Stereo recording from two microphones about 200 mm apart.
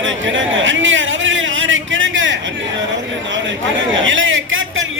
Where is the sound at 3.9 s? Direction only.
70° right (ahead or behind).